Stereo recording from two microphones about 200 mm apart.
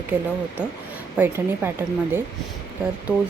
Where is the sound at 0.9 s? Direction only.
10° right (ahead or behind).